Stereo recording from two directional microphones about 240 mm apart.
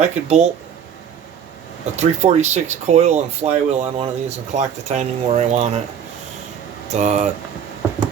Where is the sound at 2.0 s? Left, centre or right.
Right.